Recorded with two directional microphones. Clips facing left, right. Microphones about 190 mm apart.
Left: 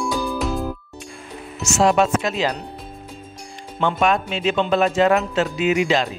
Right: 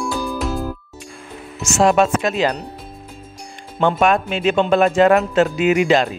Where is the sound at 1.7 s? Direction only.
50° right (ahead or behind).